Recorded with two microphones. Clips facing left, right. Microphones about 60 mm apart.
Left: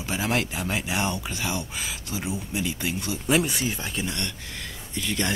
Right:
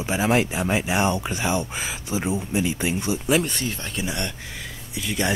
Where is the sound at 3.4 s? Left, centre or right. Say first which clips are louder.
Even; centre.